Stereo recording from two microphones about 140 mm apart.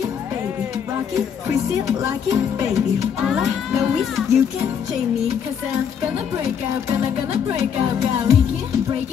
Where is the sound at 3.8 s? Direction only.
Centre (ahead or behind).